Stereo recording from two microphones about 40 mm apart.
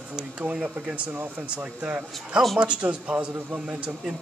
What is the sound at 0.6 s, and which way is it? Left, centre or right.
A man's voice, right.